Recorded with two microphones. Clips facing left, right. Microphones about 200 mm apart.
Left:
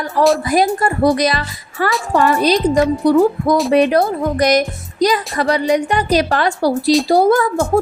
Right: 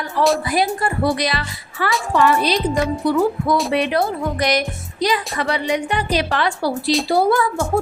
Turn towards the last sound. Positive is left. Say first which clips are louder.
# left 4 dB
turn(degrees=45)  # may be behind; listen again after turning